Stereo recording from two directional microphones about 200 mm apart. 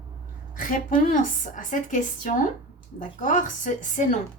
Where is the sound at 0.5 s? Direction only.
40° left (ahead or behind).